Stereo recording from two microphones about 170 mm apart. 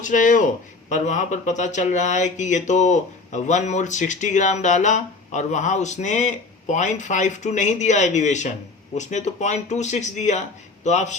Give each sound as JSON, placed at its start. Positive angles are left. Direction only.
{"t": 0.0, "sound": "speech", "side_deg": 50}